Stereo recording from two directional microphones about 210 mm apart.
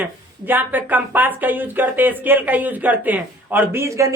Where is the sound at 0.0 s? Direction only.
10° right (ahead or behind).